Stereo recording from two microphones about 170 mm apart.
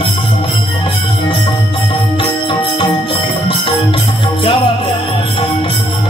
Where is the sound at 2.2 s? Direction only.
30° left (ahead or behind).